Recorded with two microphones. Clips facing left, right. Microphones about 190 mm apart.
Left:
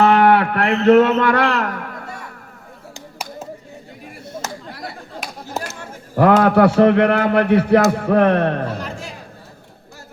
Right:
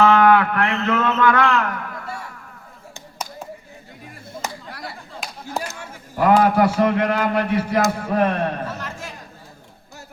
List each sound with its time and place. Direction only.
0.0 s speech: 30° left (ahead or behind)
6.2 s a man's voice: 65° left (ahead or behind)
8.6 s a sound: 15° left (ahead or behind)